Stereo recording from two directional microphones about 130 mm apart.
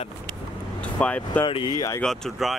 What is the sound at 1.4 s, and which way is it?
Speech, 35° left (ahead or behind).